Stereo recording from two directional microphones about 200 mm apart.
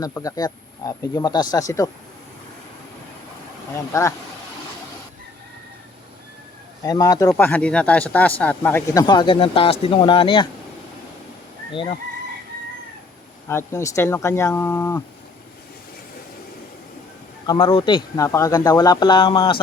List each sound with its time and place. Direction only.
0.0 s speech: 15° left (ahead or behind)
3.9 s speech: 15° left (ahead or behind)
6.8 s speech: 20° left (ahead or behind)
9.0 s speech: 25° left (ahead or behind)
11.7 s speech: 25° left (ahead or behind)
13.5 s speech: 15° left (ahead or behind)
17.4 s speech: 25° left (ahead or behind)